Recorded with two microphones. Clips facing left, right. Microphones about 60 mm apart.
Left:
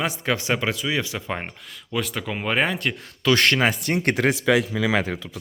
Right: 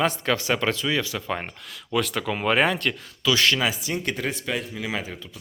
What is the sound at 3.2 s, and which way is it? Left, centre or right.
Speech, left.